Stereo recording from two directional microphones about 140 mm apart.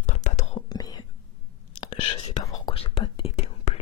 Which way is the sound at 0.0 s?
60° left (ahead or behind).